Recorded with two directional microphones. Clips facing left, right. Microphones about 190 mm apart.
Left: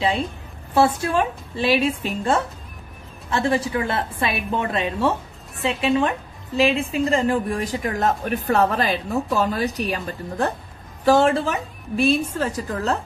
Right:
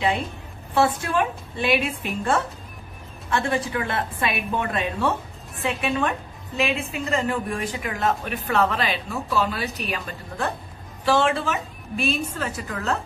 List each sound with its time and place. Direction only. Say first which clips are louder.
0.7 s a woman's voice: left 3 dB; 30° left (ahead or behind)
3.3 s a woman's voice: left 3 dB; 25° left (ahead or behind)